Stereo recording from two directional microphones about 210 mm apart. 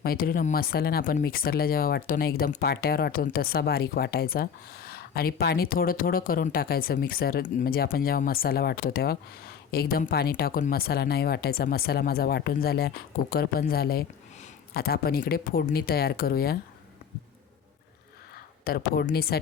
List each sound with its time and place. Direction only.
0.0 s speech: 45° left (ahead or behind)
18.6 s speech: 45° left (ahead or behind)